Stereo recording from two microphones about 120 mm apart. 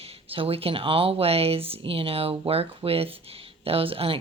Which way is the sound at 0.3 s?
50° right (ahead or behind).